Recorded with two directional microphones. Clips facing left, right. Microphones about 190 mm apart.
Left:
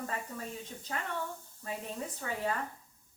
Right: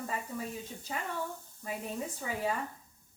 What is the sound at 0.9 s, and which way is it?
Speech, 10° right (ahead or behind).